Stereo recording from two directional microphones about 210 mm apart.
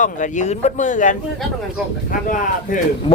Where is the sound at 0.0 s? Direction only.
35° left (ahead or behind).